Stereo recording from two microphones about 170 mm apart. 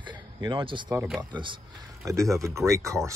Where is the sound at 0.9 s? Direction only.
5° right (ahead or behind).